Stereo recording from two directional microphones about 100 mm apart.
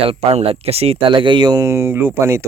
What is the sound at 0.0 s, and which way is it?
Speech, 85° right.